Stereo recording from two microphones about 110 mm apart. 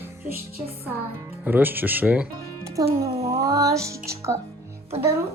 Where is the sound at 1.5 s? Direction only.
15° right (ahead or behind).